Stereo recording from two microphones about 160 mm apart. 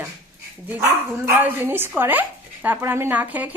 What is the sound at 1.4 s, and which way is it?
Speech, 15° right (ahead or behind).